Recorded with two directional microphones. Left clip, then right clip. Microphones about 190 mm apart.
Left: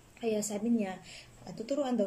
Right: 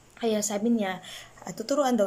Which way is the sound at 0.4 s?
10° left (ahead or behind).